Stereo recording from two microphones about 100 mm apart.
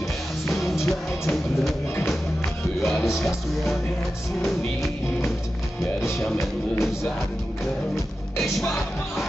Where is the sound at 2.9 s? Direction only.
5° right (ahead or behind).